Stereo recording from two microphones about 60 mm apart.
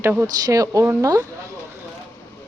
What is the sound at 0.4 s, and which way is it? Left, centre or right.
Speech, right.